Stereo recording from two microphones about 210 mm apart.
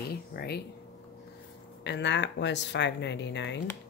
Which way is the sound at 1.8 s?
55° left (ahead or behind).